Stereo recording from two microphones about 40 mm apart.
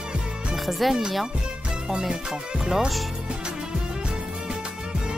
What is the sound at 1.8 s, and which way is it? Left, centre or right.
Music, centre.